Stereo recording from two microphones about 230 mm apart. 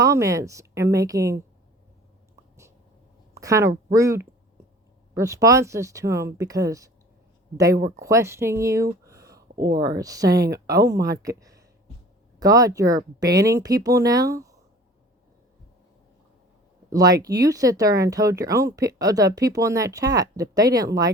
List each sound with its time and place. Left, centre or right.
0.0 s speech: centre
3.3 s speech: centre
16.9 s speech: centre